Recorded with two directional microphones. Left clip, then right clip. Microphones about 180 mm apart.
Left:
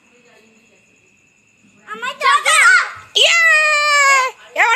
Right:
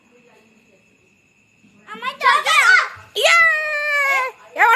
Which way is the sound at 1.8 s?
10° right (ahead or behind).